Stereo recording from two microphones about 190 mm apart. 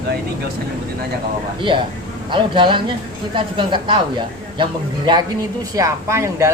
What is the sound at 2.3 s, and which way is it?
Speech, 25° right (ahead or behind).